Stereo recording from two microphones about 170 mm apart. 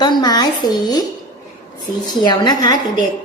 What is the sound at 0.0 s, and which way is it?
A woman's voice, 25° left (ahead or behind).